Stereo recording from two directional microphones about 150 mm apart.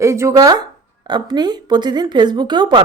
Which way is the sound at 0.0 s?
20° right (ahead or behind).